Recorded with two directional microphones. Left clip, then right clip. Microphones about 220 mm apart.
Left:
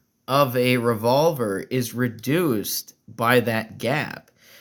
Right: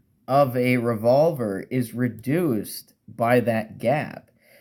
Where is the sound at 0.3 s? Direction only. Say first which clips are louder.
Even; 35° left (ahead or behind).